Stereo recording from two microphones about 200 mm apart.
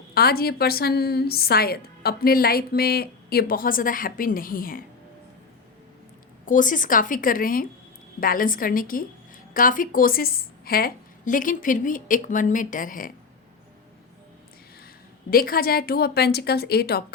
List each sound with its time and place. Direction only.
0.1 s a woman's voice: 50° left (ahead or behind)
6.4 s a woman's voice: 40° left (ahead or behind)
15.3 s a woman's voice: 45° left (ahead or behind)